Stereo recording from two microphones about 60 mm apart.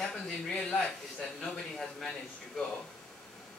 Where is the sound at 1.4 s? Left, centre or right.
Centre.